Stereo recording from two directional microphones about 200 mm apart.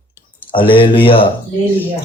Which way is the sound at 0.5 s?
25° left (ahead or behind).